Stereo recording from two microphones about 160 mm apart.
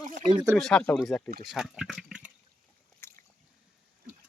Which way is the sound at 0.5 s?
5° left (ahead or behind).